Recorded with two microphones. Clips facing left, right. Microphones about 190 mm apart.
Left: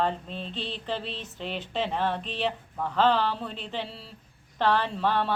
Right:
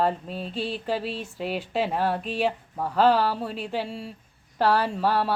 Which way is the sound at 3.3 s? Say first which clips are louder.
Right 4 dB; 5° right (ahead or behind).